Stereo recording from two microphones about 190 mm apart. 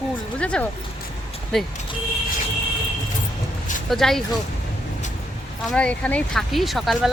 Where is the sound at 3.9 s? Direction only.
Centre (ahead or behind).